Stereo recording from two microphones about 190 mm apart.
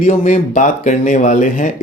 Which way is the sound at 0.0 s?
40° left (ahead or behind).